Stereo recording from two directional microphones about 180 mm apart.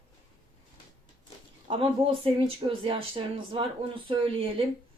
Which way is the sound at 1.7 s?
30° right (ahead or behind).